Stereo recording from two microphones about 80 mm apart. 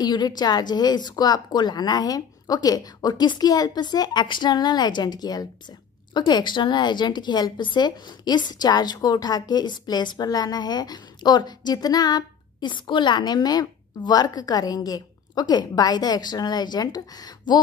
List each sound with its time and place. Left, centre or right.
0.0 s a woman's voice: left
6.1 s a woman's voice: left